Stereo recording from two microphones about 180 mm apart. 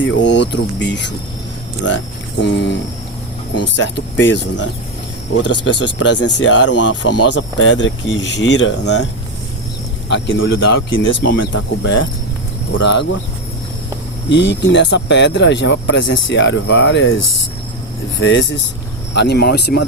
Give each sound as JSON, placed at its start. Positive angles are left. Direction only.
{"t": 0.0, "sound": "speech", "side_deg": 85}
{"t": 2.4, "sound": "speech", "side_deg": 75}
{"t": 3.8, "sound": "speech", "side_deg": 90}
{"t": 10.1, "sound": "speech", "side_deg": 90}
{"t": 12.7, "sound": "speech", "side_deg": 80}
{"t": 14.3, "sound": "speech", "side_deg": 80}
{"t": 18.2, "sound": "speech", "side_deg": 90}
{"t": 19.1, "sound": "speech", "side_deg": 70}